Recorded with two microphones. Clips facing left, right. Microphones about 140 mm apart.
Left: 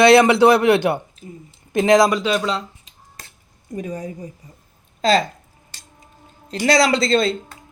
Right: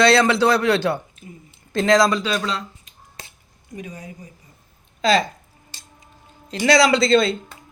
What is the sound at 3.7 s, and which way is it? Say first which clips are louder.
Speech: left 7 dB; 45° left (ahead or behind).